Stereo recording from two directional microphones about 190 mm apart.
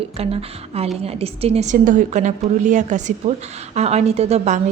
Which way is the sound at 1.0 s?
30° right (ahead or behind).